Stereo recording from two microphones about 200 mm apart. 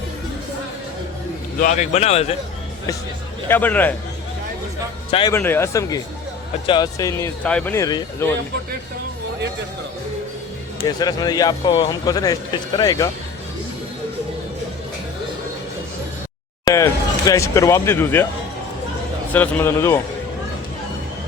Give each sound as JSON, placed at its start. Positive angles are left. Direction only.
{"t": 1.5, "sound": "speech", "side_deg": 40}
{"t": 3.5, "sound": "speech", "side_deg": 10}
{"t": 5.3, "sound": "speech", "side_deg": 10}
{"t": 10.8, "sound": "speech", "side_deg": 20}
{"t": 16.6, "sound": "speech", "side_deg": 15}
{"t": 19.3, "sound": "speech", "side_deg": 10}